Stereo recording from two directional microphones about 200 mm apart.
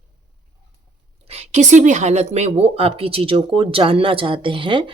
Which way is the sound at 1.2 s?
30° right (ahead or behind).